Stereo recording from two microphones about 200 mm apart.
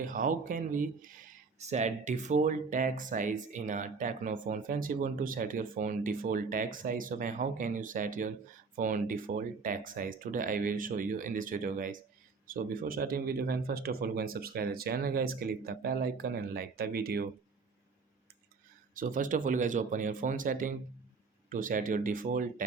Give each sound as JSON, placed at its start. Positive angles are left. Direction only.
{"t": 0.0, "sound": "speech", "side_deg": -45}
{"t": 18.9, "sound": "speech", "side_deg": -40}